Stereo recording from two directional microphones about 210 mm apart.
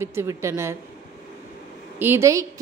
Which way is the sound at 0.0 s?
10° right (ahead or behind).